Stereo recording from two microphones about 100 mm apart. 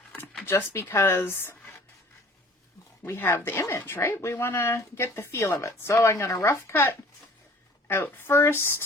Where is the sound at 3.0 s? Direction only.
20° left (ahead or behind).